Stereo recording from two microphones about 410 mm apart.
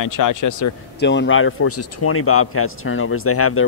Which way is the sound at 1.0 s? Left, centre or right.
Left.